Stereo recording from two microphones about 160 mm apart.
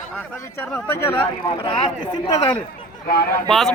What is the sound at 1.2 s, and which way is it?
Speech, 35° left (ahead or behind).